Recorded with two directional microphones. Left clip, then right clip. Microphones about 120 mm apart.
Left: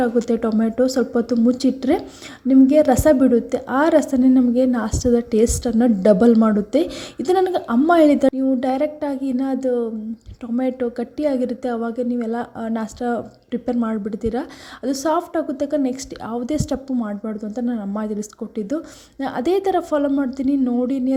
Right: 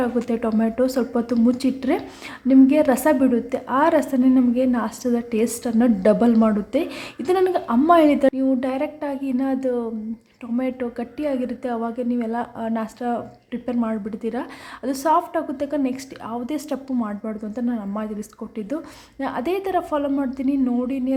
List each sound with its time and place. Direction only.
0.0 s a woman's voice: 25° left (ahead or behind)
20.8 s a woman's voice: 40° left (ahead or behind)